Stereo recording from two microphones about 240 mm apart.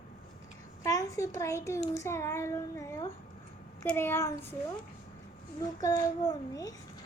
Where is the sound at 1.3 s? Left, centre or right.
Centre.